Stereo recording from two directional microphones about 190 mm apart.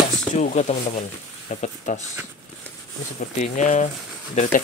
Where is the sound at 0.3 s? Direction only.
40° left (ahead or behind).